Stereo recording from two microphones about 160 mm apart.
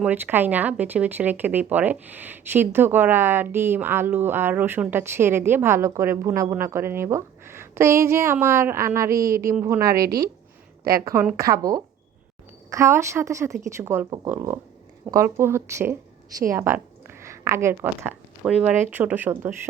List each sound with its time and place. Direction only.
0.0 s a woman's voice: 10° right (ahead or behind)